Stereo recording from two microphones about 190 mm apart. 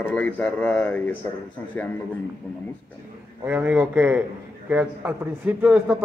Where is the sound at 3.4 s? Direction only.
10° right (ahead or behind).